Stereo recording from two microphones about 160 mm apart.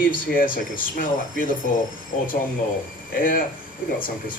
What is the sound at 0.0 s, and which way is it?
Speech, 60° left (ahead or behind).